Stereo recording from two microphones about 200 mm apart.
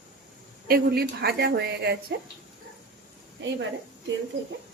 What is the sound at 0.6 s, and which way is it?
Speech, 50° right (ahead or behind).